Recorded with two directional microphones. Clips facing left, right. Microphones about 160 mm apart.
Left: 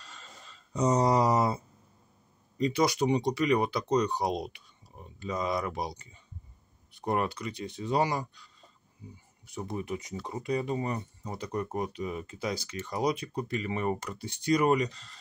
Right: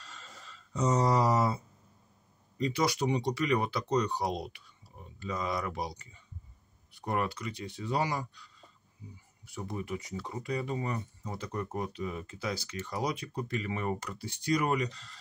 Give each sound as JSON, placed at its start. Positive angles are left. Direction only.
{"t": 0.0, "sound": "a sound", "side_deg": 15}
{"t": 2.6, "sound": "speech", "side_deg": 20}
{"t": 9.5, "sound": "speech", "side_deg": 20}